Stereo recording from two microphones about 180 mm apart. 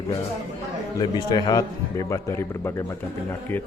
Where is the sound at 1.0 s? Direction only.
20° left (ahead or behind).